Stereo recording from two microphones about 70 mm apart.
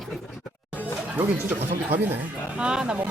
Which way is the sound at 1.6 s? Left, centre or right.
Right.